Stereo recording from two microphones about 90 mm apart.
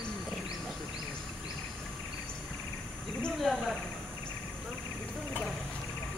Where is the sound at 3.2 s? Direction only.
Centre (ahead or behind).